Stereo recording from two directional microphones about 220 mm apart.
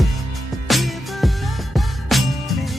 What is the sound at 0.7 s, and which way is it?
Music, centre (ahead or behind).